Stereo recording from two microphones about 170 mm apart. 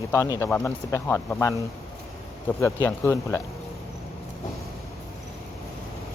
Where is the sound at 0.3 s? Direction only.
10° left (ahead or behind).